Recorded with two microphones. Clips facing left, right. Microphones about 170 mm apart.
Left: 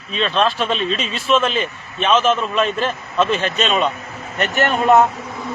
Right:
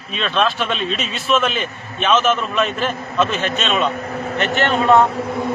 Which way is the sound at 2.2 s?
30° left (ahead or behind).